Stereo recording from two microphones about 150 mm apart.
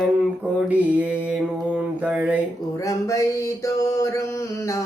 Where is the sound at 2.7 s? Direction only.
20° left (ahead or behind).